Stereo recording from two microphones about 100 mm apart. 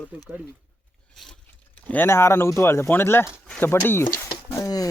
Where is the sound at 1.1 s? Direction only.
Centre (ahead or behind).